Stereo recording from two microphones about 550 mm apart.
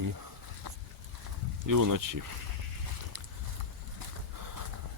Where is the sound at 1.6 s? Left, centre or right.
Right.